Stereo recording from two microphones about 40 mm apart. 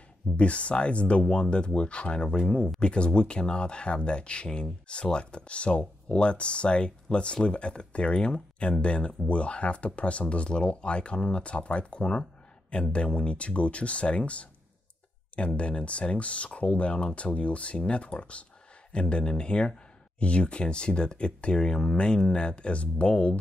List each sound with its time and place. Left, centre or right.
0.4 s speech: left